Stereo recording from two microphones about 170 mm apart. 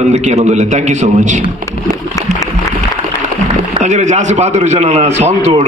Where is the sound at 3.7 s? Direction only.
45° right (ahead or behind).